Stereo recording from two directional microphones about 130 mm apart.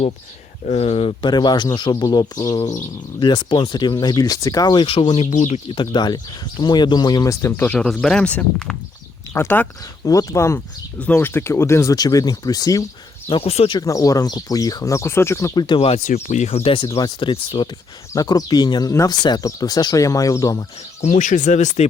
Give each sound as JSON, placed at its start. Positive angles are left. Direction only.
{"t": 0.7, "sound": "speech", "side_deg": 50}
{"t": 5.2, "sound": "speech", "side_deg": 70}
{"t": 5.6, "sound": "speech", "side_deg": 40}
{"t": 13.3, "sound": "speech", "side_deg": 50}
{"t": 13.7, "sound": "speech", "side_deg": 25}
{"t": 15.6, "sound": "speech", "side_deg": 40}
{"t": 16.0, "sound": "speech", "side_deg": 65}
{"t": 17.0, "sound": "speech", "side_deg": 40}
{"t": 21.0, "sound": "speech", "side_deg": 70}